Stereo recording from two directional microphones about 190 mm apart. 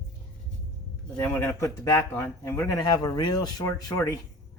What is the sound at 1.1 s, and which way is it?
Speech, 10° left (ahead or behind).